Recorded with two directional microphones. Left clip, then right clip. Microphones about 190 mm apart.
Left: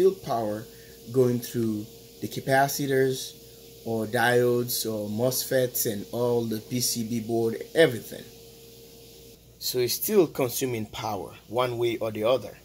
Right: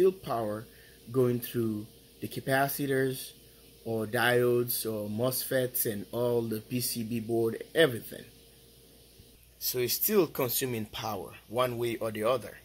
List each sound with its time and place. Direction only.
0.0 s speech: 25° right (ahead or behind)
9.7 s speech: centre (ahead or behind)